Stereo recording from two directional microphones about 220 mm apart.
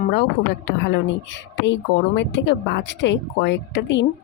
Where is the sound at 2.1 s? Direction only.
55° left (ahead or behind).